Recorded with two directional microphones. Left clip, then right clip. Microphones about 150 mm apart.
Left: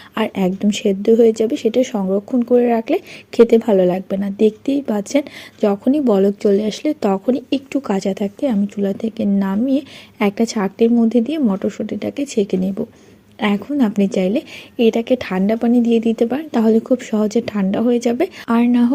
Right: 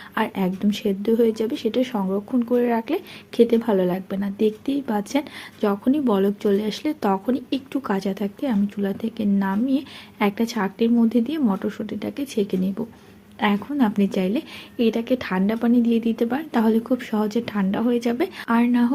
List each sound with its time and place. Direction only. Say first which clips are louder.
0.1 s speech: left 5 dB; 45° left (ahead or behind)